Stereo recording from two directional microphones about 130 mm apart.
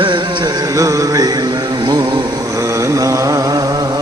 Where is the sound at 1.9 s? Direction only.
30° right (ahead or behind).